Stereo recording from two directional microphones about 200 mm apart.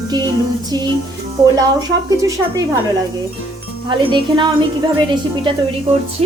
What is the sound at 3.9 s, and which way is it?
Speech, 25° right (ahead or behind).